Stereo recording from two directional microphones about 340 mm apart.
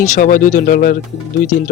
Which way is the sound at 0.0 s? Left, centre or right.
Left.